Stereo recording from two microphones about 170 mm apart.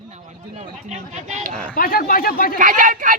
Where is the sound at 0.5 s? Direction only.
45° right (ahead or behind).